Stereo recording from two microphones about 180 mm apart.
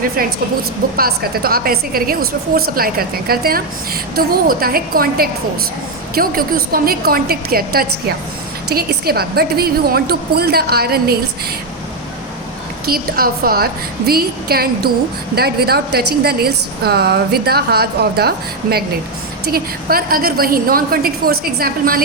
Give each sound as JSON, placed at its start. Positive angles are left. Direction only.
{"t": 0.2, "sound": "a woman's voice", "side_deg": -55}
{"t": 12.8, "sound": "a woman's voice", "side_deg": -55}